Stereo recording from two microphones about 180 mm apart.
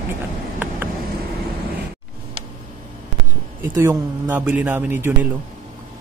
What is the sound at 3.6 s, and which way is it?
A man's voice, 15° right (ahead or behind).